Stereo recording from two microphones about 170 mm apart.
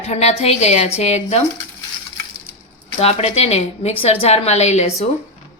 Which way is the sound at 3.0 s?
40° left (ahead or behind).